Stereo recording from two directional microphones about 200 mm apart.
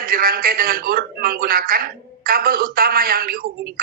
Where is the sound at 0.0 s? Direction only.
45° right (ahead or behind).